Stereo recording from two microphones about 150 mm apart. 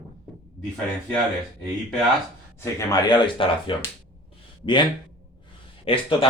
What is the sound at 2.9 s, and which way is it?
Speech, 30° left (ahead or behind).